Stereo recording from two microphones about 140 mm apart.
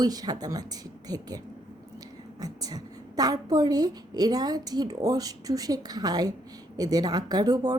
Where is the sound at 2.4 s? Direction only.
25° right (ahead or behind).